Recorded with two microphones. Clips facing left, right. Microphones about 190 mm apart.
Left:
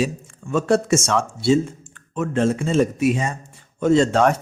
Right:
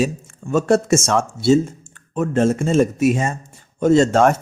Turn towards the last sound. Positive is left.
turn(degrees=-45)  # may be behind; listen again after turning